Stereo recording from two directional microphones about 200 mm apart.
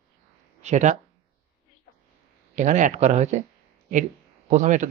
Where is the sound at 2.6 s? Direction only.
40° right (ahead or behind).